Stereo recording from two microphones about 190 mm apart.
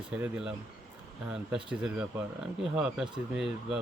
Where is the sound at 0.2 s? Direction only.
5° right (ahead or behind).